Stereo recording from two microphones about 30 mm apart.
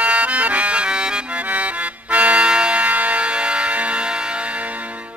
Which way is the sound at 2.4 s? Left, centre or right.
Right.